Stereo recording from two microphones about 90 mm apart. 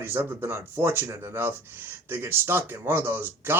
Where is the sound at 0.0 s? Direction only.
25° right (ahead or behind).